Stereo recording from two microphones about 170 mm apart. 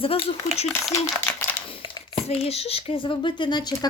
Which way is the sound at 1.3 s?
15° left (ahead or behind).